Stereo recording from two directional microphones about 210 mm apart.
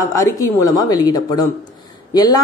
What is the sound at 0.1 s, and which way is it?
Speech, 15° left (ahead or behind).